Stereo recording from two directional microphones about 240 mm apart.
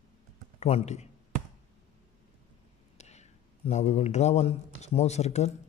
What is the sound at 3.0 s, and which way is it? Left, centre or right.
Speech, left.